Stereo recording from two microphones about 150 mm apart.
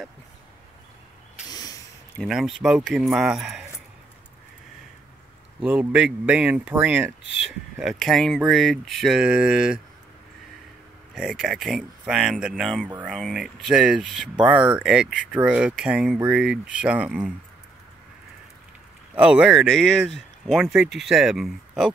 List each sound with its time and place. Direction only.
1.5 s a sound: 25° left (ahead or behind)
2.2 s speech: centre (ahead or behind)
5.6 s speech: 10° right (ahead or behind)
11.1 s speech: 5° right (ahead or behind)
19.1 s speech: 10° right (ahead or behind)